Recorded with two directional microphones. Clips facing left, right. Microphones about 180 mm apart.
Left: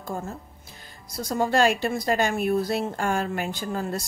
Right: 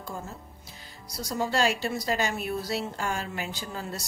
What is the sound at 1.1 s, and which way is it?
Speech, 50° left (ahead or behind).